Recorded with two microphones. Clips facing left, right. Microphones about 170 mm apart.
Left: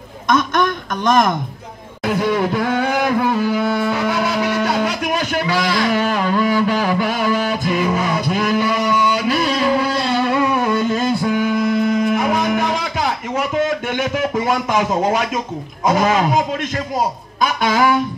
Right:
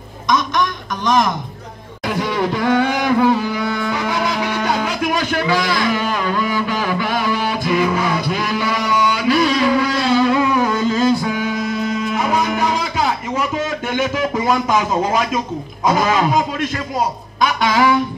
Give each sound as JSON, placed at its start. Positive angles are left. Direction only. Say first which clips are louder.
{"t": 0.3, "sound": "a woman's voice", "louder": "left 2 dB", "side_deg": 55}
{"t": 2.0, "sound": "music", "louder": "left 2 dB", "side_deg": 50}
{"t": 15.9, "sound": "a man's voice", "louder": "left 1 dB", "side_deg": 50}
{"t": 17.4, "sound": "a sound", "louder": "right 1 dB", "side_deg": 50}